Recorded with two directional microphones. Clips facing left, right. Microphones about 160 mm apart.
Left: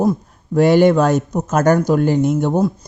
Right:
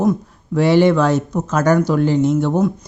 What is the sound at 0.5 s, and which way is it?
Speech, 45° left (ahead or behind).